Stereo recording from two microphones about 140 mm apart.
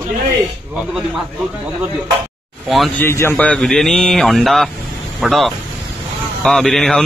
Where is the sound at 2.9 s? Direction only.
15° left (ahead or behind).